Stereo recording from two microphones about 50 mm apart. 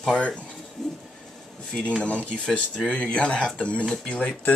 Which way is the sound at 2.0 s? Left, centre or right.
Left.